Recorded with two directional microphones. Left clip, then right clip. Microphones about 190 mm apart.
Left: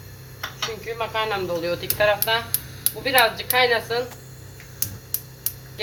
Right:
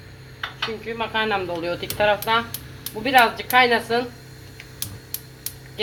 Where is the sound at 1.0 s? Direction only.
40° right (ahead or behind).